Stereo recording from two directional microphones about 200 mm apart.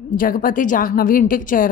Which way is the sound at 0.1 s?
45° left (ahead or behind).